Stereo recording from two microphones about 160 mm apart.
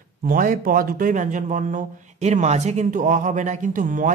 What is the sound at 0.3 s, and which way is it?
A man's voice, 60° right (ahead or behind).